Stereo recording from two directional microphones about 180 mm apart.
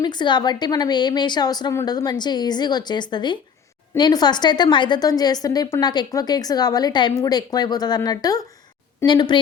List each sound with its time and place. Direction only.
0.0 s a woman's voice: 25° left (ahead or behind)